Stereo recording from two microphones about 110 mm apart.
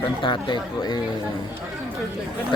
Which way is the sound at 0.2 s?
45° left (ahead or behind).